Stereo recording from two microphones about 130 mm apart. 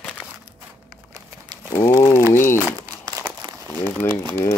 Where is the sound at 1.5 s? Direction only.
35° right (ahead or behind).